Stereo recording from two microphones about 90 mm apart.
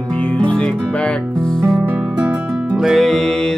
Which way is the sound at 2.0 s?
15° right (ahead or behind).